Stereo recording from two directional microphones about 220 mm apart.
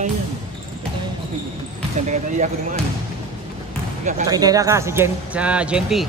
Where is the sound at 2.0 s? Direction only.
35° right (ahead or behind).